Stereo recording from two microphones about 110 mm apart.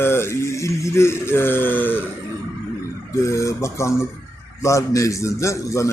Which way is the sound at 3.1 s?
25° left (ahead or behind).